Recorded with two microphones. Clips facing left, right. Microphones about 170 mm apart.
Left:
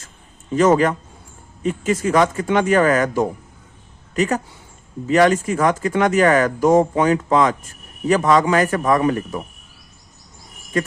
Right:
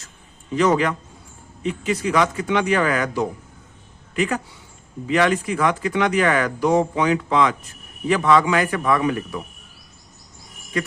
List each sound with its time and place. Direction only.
0.5 s a woman's voice: 45° left (ahead or behind)